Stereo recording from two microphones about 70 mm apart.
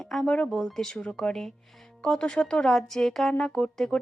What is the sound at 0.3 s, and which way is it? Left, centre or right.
Speech, centre.